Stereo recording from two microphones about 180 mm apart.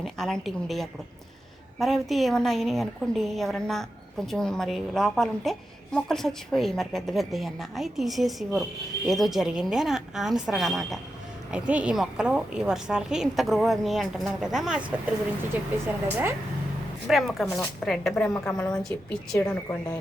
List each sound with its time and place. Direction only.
0.0 s a woman's voice: centre (ahead or behind)
16.0 s a woman's voice: 10° right (ahead or behind)
17.1 s a woman's voice: centre (ahead or behind)